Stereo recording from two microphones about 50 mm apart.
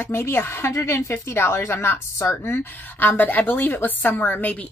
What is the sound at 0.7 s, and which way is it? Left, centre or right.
A woman's voice, left.